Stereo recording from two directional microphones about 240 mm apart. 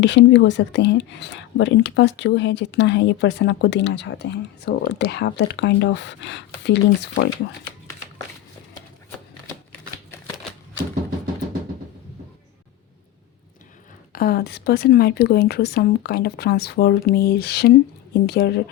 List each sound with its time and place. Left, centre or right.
0.0 s speech: left
14.1 s speech: left